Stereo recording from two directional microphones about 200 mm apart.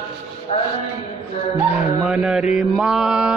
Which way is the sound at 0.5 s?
35° left (ahead or behind).